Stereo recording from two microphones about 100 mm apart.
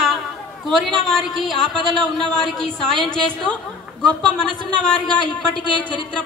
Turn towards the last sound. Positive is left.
turn(degrees=10)  # may be behind; listen again after turning